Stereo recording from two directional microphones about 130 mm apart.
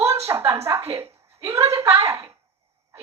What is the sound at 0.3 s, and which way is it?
Speech, 20° right (ahead or behind).